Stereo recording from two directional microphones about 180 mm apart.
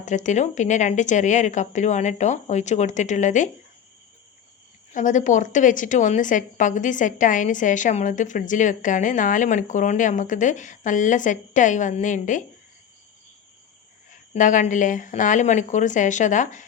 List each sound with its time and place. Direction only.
0.0 s a woman's voice: 45° left (ahead or behind)
4.9 s a woman's voice: 45° left (ahead or behind)
14.1 s a woman's voice: 45° left (ahead or behind)